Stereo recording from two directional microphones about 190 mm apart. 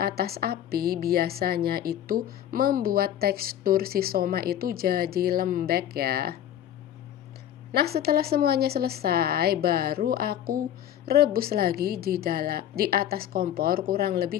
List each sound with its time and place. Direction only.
0.2 s speech: 55° right (ahead or behind)
7.7 s speech: 55° right (ahead or behind)